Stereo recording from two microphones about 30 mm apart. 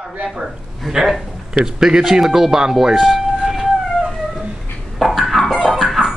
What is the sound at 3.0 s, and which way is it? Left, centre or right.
Siren, centre.